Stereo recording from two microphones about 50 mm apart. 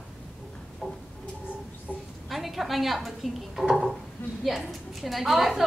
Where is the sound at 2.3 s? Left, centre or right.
Centre.